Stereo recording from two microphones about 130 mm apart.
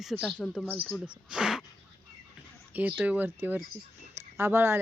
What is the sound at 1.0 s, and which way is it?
Speech, 5° right (ahead or behind).